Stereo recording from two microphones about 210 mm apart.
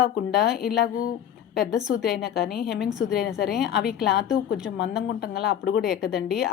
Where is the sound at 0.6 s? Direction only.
45° left (ahead or behind).